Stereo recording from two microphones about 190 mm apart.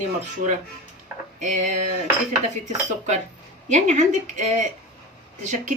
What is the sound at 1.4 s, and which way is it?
Speech, 40° right (ahead or behind).